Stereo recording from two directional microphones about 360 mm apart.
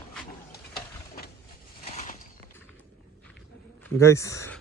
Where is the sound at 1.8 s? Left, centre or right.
Centre.